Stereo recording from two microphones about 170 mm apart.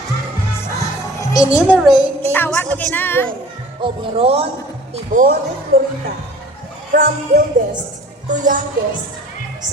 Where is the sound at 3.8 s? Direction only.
30° right (ahead or behind).